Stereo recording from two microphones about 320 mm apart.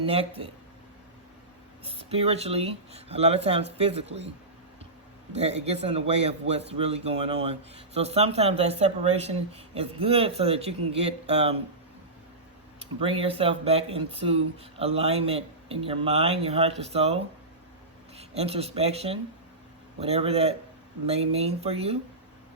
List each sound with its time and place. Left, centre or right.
0.0 s speech: centre
1.8 s speech: centre
5.3 s speech: centre
12.8 s speech: centre